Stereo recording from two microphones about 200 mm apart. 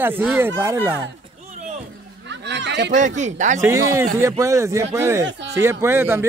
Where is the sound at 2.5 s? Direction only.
60° right (ahead or behind).